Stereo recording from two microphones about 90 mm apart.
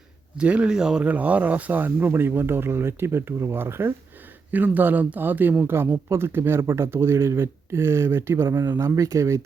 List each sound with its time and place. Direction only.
0.3 s speech: 10° right (ahead or behind); by 9.4 s 35° right (ahead or behind)